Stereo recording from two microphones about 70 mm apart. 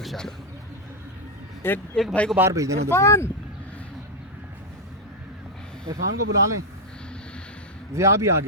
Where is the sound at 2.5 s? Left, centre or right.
Right.